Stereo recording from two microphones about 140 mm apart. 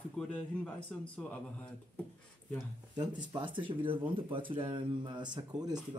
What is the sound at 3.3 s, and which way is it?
Speech, 35° right (ahead or behind).